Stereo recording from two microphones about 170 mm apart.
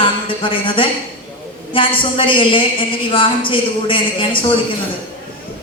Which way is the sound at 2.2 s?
30° left (ahead or behind).